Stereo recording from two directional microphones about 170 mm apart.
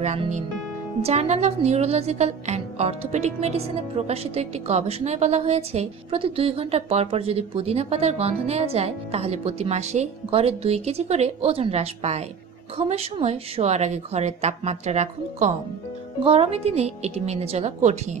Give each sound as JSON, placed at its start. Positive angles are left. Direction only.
{"t": 0.0, "sound": "a woman's voice", "side_deg": -40}